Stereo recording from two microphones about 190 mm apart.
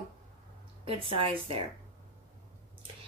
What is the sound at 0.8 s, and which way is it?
Speech, 30° right (ahead or behind).